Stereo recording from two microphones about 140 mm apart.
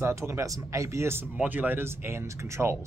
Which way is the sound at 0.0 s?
20° right (ahead or behind).